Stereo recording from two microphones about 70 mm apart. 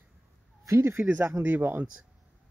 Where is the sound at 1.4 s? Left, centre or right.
Right.